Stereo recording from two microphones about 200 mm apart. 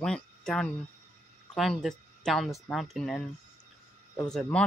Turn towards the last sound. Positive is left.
turn(degrees=5)  # may be behind; listen again after turning